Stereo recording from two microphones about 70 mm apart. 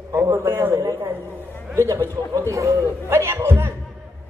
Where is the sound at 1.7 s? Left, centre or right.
Right.